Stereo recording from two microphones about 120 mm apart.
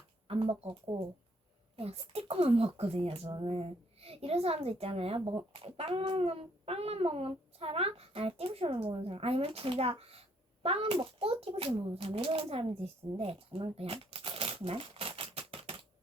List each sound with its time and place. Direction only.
0.3 s speech: 50° right (ahead or behind)
1.7 s speech: 55° right (ahead or behind)